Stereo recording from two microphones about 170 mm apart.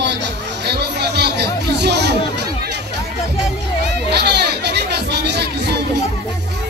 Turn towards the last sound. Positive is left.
turn(degrees=-80)